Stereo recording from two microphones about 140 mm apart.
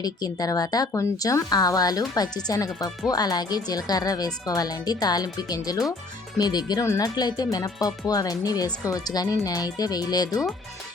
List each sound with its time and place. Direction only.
0.0 s speech: 25° left (ahead or behind)